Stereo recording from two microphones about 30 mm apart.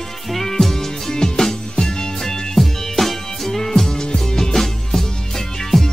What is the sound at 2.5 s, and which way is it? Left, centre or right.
Music, centre.